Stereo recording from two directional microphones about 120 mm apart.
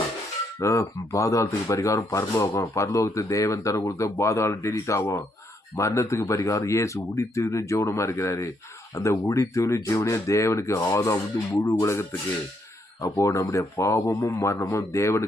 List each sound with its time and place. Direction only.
0.6 s speech: 25° left (ahead or behind)